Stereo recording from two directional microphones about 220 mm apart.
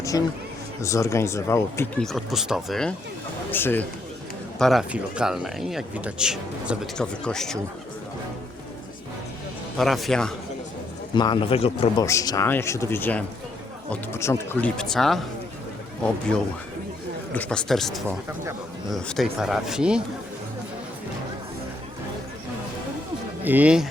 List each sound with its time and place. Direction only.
0.1 s speech: 15° left (ahead or behind)
9.7 s speech: centre (ahead or behind)
11.1 s speech: 20° left (ahead or behind)
12.0 s speech: 15° left (ahead or behind)
17.3 s speech: 5° left (ahead or behind)
23.4 s speech: 10° right (ahead or behind)